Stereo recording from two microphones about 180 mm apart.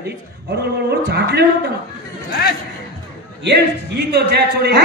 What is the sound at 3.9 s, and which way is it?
Speech, 65° right (ahead or behind).